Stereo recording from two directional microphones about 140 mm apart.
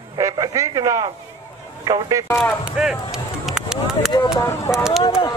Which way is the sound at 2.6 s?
5° right (ahead or behind).